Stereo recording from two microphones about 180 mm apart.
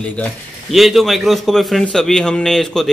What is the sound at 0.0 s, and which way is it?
A man's voice, 5° left (ahead or behind).